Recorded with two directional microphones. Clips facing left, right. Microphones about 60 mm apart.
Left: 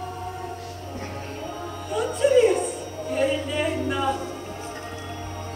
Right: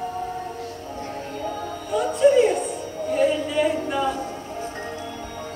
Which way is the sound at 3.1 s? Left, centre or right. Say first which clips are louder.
Right 3 dB; centre.